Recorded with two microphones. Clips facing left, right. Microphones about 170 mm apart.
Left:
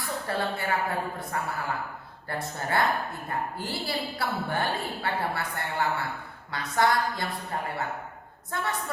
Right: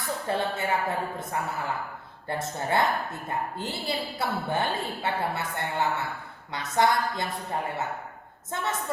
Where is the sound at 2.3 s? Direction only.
20° right (ahead or behind).